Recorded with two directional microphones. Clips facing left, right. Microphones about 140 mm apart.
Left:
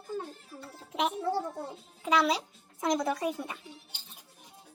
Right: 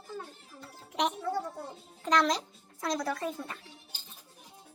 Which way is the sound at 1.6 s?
5° left (ahead or behind).